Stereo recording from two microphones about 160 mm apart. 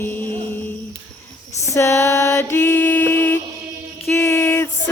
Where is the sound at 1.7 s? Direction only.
20° left (ahead or behind).